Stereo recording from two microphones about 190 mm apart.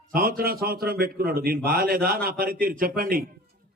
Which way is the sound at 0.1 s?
50° right (ahead or behind).